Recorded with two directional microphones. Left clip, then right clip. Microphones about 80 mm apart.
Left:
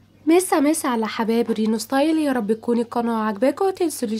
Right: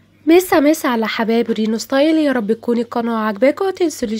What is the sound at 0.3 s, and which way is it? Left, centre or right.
Speech, right.